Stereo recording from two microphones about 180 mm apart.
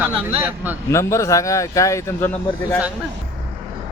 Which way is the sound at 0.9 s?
15° left (ahead or behind).